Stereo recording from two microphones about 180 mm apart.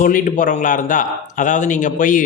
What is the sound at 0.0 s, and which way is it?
A man's voice, 45° left (ahead or behind).